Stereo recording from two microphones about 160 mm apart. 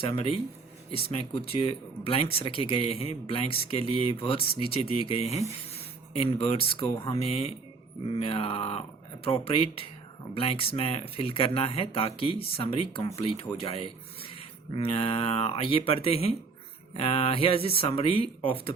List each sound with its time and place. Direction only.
0.0 s speech: 35° left (ahead or behind)